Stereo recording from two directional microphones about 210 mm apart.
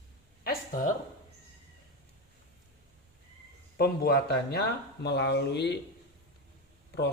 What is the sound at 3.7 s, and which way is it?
Speech, 50° left (ahead or behind).